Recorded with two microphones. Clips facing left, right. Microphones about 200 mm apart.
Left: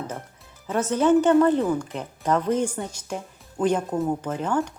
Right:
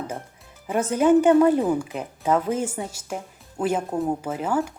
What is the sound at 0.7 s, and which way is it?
A woman's voice, 10° right (ahead or behind).